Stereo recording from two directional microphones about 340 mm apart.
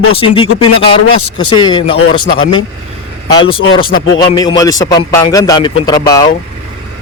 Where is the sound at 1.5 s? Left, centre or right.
Centre.